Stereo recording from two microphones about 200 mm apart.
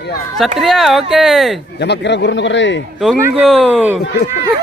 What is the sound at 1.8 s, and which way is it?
A man's voice, 60° left (ahead or behind).